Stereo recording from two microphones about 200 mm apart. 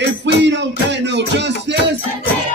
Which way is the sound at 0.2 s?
60° right (ahead or behind).